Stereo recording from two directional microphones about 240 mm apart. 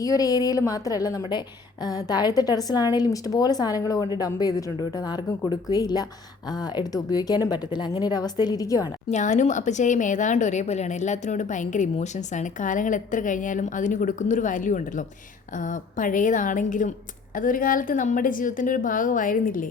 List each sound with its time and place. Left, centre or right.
0.0 s a woman's voice: centre
9.0 s speech: left